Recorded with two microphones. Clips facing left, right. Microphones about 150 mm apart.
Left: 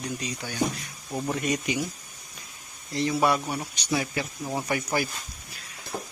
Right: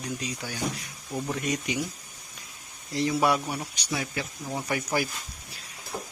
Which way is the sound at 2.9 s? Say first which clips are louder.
Even; 10° right (ahead or behind).